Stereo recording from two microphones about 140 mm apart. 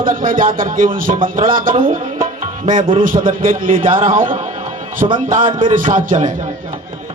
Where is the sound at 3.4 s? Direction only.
80° right.